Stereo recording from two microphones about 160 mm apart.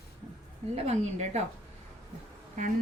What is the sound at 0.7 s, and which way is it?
Speech, 40° right (ahead or behind).